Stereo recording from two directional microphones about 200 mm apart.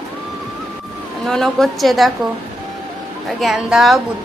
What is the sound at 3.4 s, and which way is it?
Speech, centre (ahead or behind).